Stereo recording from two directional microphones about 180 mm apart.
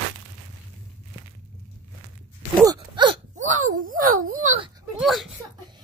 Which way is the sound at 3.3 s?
45° right (ahead or behind).